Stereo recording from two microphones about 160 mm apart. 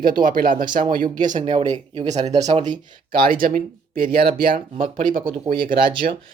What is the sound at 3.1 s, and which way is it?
Speech, 65° right (ahead or behind).